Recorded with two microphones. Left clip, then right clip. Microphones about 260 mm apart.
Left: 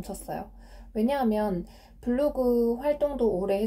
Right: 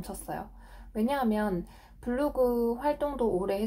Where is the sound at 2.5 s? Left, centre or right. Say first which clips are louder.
Left 4 dB; right.